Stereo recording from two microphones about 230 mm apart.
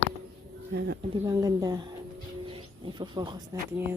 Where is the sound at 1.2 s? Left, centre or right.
Centre.